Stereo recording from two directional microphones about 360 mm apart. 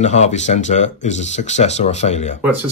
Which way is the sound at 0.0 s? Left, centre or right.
Centre.